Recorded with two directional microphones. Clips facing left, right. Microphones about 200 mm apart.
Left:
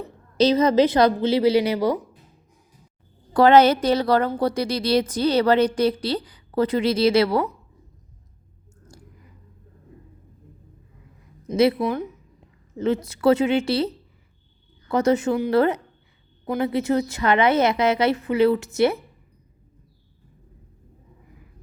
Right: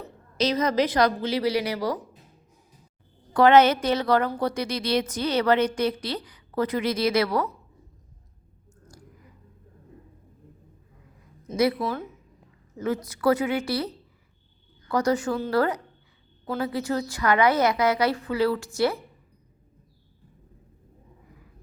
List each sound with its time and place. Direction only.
0.3 s a woman's voice: 30° left (ahead or behind)
3.3 s a woman's voice: 35° left (ahead or behind)
11.4 s a woman's voice: 25° left (ahead or behind)